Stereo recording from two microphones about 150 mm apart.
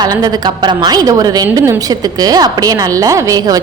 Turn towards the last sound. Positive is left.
turn(degrees=-25)  # may be behind; listen again after turning